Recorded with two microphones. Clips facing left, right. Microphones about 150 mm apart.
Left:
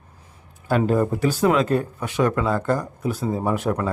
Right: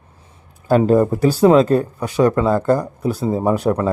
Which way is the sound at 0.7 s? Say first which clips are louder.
Right 6 dB; 35° right (ahead or behind).